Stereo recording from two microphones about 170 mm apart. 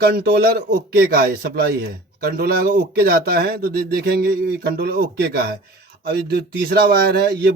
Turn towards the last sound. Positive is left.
turn(degrees=-65)  # may be behind; listen again after turning